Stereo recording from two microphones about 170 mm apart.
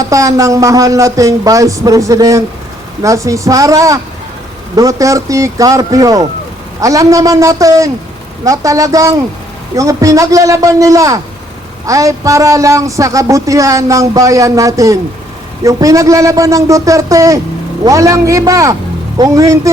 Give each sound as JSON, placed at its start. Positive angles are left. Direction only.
{"t": 0.0, "sound": "speech", "side_deg": -20}